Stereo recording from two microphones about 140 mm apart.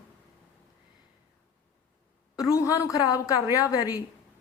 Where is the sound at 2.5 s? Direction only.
25° left (ahead or behind).